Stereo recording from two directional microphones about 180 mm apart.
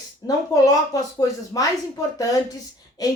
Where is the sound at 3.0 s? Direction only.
20° left (ahead or behind).